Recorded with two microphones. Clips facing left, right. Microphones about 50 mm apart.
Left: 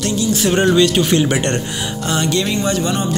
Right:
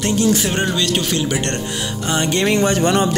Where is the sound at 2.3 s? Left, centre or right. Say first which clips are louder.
Right 4 dB; right.